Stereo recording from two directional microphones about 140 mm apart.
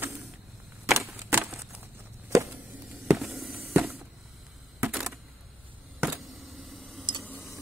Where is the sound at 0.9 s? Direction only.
20° right (ahead or behind).